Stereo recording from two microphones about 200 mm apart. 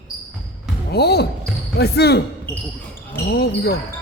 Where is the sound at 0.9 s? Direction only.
55° left (ahead or behind).